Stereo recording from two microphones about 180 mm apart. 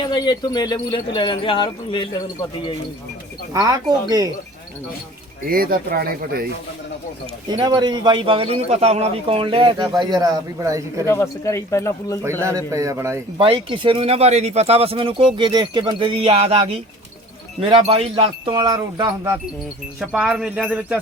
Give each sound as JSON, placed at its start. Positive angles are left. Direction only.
{"t": 0.0, "sound": "wind chime", "side_deg": 25}
{"t": 3.5, "sound": "a man's voice", "side_deg": -20}
{"t": 5.5, "sound": "speech", "side_deg": -55}
{"t": 7.4, "sound": "a man's voice", "side_deg": -25}
{"t": 11.0, "sound": "speech", "side_deg": 15}
{"t": 12.2, "sound": "jingle bell", "side_deg": -15}
{"t": 13.4, "sound": "a man's voice", "side_deg": -30}
{"t": 20.0, "sound": "jingle bell", "side_deg": -5}